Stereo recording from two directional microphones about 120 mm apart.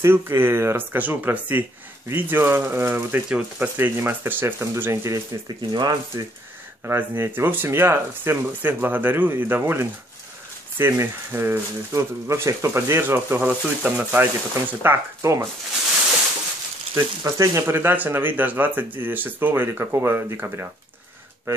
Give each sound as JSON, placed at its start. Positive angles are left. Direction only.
{"t": 0.0, "sound": "speech", "side_deg": -20}
{"t": 5.3, "sound": "speech", "side_deg": -30}
{"t": 6.8, "sound": "speech", "side_deg": -15}
{"t": 16.9, "sound": "speech", "side_deg": -25}